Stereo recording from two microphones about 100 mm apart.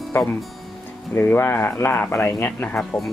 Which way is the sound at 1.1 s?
20° left (ahead or behind).